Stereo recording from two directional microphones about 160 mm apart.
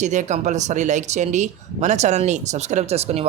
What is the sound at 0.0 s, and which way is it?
Speech, 50° right (ahead or behind).